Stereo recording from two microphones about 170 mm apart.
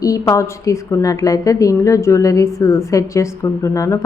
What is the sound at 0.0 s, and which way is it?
A woman's voice, 20° left (ahead or behind).